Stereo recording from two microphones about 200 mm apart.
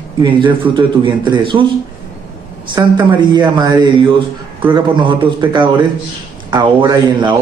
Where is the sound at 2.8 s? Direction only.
15° right (ahead or behind).